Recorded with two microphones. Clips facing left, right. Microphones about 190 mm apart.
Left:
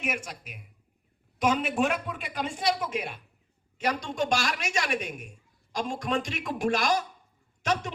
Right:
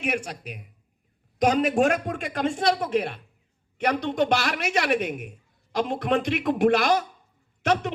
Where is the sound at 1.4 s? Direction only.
40° right (ahead or behind).